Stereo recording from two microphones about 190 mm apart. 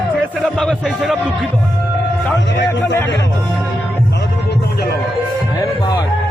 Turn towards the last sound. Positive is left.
turn(degrees=20)  # may be behind; listen again after turning